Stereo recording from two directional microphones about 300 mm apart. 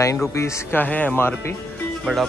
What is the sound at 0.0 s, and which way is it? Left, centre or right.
Speech, centre.